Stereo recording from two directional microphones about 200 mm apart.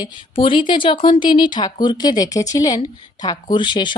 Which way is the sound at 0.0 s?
25° left (ahead or behind).